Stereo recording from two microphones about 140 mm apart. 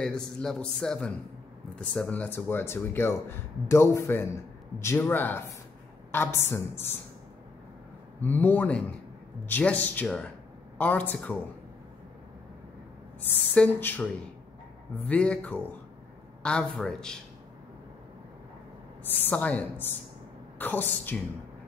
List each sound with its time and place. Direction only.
0.0 s a man's voice: 5° left (ahead or behind)
8.2 s speech: 15° left (ahead or behind)
13.5 s speech: 15° left (ahead or behind)
15.0 s a man's voice: 10° left (ahead or behind)
19.0 s speech: 15° left (ahead or behind)